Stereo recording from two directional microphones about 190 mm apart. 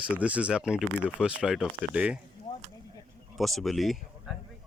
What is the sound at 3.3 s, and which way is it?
Speech, centre (ahead or behind).